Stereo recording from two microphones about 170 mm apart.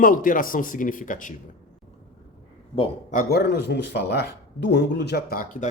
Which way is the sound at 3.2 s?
70° left (ahead or behind).